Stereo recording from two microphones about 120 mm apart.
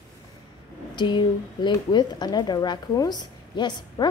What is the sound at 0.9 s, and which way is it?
A woman's voice, 40° left (ahead or behind).